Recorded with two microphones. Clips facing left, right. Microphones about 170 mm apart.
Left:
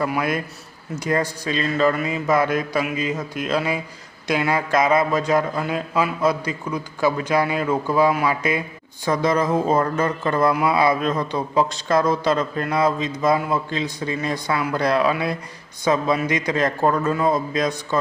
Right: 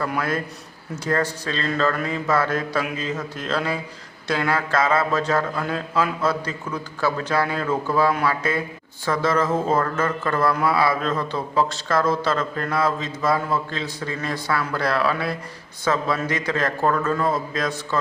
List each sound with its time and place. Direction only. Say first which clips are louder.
0.0 s speech: left 2 dB; 10° left (ahead or behind)